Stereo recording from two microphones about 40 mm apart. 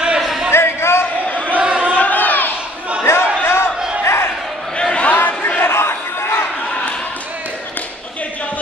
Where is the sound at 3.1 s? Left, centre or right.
Left.